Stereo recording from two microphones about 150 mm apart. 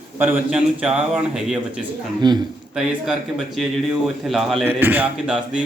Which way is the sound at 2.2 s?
30° right (ahead or behind).